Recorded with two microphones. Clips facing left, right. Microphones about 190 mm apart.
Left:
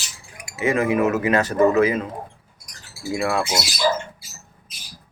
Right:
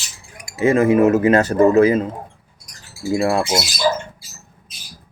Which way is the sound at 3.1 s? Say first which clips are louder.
Right 5 dB; 30° right (ahead or behind).